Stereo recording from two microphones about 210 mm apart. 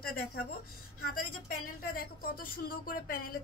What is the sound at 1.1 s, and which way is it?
Speech, 45° left (ahead or behind).